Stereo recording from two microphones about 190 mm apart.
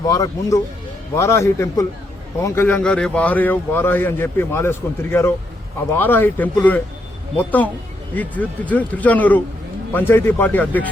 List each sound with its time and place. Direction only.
0.0 s speech: 20° left (ahead or behind)